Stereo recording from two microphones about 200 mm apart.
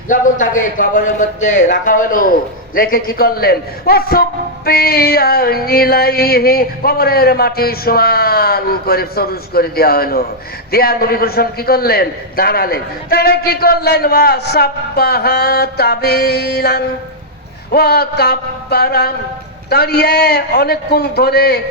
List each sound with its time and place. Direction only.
0.1 s a man's voice: 40° left (ahead or behind)